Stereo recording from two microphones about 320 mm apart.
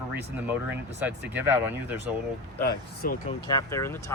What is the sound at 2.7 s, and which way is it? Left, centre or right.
Speech, left.